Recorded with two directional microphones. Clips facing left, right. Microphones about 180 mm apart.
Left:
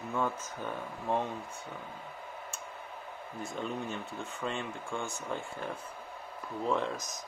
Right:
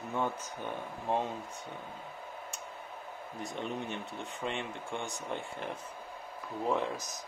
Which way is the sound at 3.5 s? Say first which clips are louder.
Left 1 dB; 20° right (ahead or behind).